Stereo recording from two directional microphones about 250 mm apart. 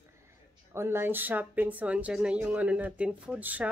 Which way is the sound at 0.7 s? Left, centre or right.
Centre.